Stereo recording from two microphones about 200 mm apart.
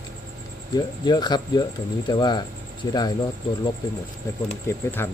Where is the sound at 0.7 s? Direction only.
20° left (ahead or behind).